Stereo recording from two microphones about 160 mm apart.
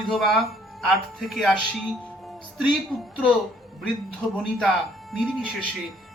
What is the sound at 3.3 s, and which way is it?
Speech, centre (ahead or behind).